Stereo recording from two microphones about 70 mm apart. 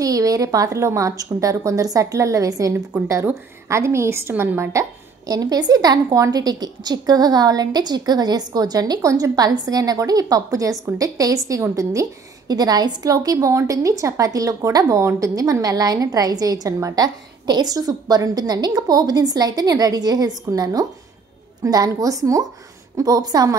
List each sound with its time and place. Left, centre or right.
0.0 s a woman's voice: right
5.3 s a woman's voice: right
12.4 s a woman's voice: right